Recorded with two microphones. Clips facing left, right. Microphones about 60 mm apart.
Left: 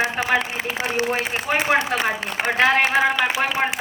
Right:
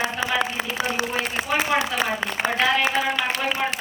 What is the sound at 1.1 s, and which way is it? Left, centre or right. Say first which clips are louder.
A woman's voice: left 2 dB; left.